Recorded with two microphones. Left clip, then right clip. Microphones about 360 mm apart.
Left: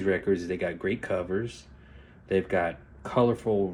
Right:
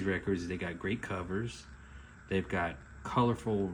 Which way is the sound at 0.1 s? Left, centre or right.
Centre.